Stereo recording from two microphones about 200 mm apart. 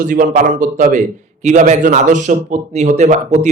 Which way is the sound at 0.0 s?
40° right (ahead or behind).